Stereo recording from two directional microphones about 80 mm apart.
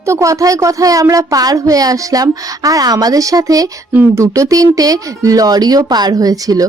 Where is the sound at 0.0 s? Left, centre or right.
Right.